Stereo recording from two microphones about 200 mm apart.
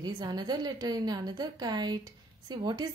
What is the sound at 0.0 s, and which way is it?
Speech, 20° right (ahead or behind).